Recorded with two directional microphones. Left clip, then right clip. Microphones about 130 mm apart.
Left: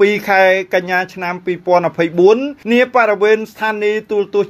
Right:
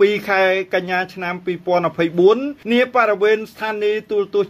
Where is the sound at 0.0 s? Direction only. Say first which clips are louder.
Left 4 dB; 35° left (ahead or behind).